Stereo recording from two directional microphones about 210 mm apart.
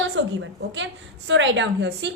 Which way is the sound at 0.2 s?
60° right (ahead or behind).